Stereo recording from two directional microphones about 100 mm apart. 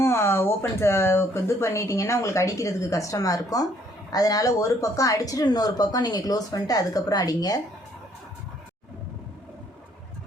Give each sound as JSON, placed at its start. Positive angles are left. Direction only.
{"t": 0.0, "sound": "speech", "side_deg": 25}